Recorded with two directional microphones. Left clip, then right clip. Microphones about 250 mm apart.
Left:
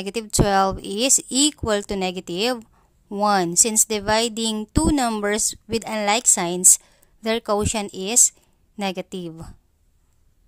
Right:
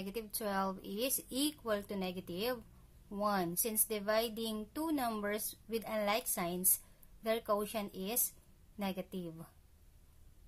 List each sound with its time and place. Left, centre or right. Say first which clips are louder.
0.0 s a woman's voice: left 18 dB; left